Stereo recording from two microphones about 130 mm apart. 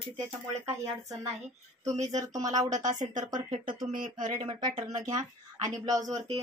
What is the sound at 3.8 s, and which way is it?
Speech, 90° right.